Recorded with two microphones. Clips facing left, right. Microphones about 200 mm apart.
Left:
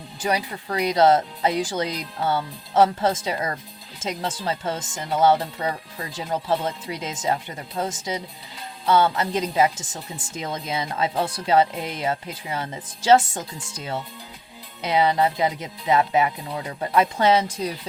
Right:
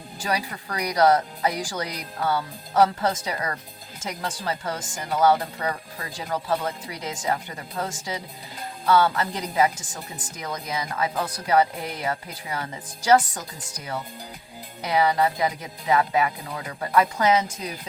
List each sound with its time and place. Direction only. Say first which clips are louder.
0.2 s a woman's voice: left 3 dB; 20° left (ahead or behind)